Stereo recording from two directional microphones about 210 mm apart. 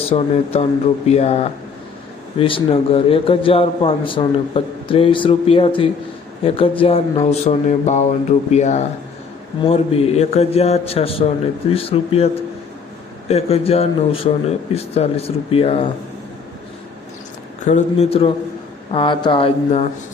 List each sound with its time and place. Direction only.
0.0 s a man's voice: 25° left (ahead or behind)
17.7 s a man's voice: 35° left (ahead or behind)